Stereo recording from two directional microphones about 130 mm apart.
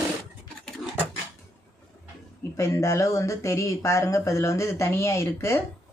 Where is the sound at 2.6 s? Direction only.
25° left (ahead or behind).